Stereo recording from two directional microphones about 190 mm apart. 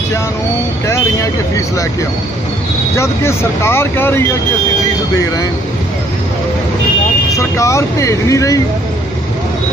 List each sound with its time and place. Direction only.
0.8 s speech: 15° left (ahead or behind)
3.0 s speech: 15° left (ahead or behind)
7.3 s speech: 15° left (ahead or behind)